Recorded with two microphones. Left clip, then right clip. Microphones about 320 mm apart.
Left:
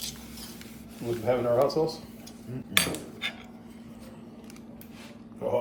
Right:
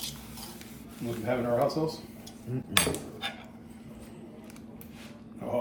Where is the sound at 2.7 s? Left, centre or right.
Centre.